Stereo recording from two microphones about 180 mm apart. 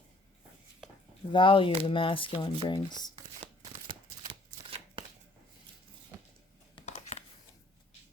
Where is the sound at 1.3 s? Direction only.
30° left (ahead or behind).